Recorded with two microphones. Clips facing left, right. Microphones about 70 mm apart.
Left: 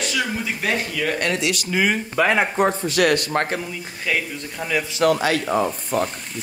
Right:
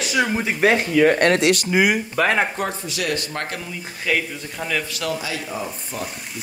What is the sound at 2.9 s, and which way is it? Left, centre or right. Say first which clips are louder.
Speech: left 7 dB; left.